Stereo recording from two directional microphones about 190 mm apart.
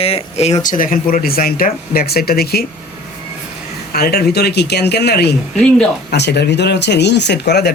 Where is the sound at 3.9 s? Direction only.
55° left (ahead or behind).